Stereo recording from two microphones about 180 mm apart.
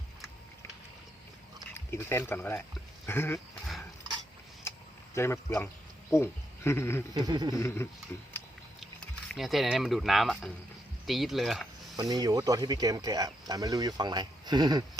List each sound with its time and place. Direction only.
1.9 s speech: 15° left (ahead or behind)
3.3 s dog: centre (ahead or behind)
4.7 s vehicle: 15° left (ahead or behind)
5.1 s speech: 15° left (ahead or behind)
7.1 s speech: 20° right (ahead or behind)
7.5 s speech: 15° left (ahead or behind)
9.3 s speech: centre (ahead or behind)
11.9 s speech: 20° right (ahead or behind)